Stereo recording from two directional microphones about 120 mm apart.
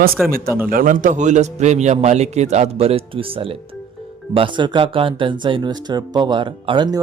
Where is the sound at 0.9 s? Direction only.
90° right.